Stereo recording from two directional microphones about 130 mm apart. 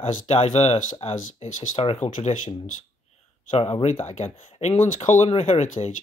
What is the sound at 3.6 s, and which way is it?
Speech, 55° left (ahead or behind).